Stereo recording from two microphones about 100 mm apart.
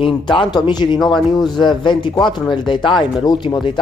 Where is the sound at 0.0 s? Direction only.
60° left (ahead or behind).